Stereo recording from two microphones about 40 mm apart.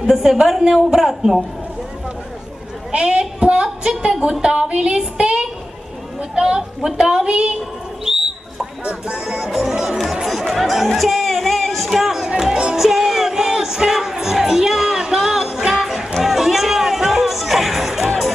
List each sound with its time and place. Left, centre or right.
0.0 s a woman's voice: centre
2.9 s a sound: right
4.1 s a woman's voice: right
8.0 s bird: centre
8.8 s a woman's voice: right
9.3 s a woman's voice: centre
10.4 s chatter: centre
11.9 s a woman's voice: centre
12.7 s music: centre